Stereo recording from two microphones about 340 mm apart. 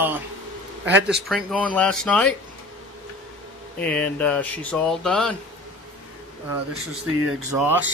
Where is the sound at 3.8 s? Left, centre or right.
Centre.